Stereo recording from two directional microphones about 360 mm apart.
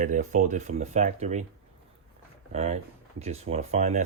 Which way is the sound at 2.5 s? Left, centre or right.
Centre.